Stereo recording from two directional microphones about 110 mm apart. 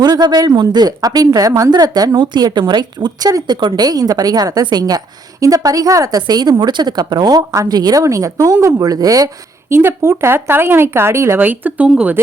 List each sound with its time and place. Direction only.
0.0 s speech: 40° right (ahead or behind); by 12.2 s 15° right (ahead or behind)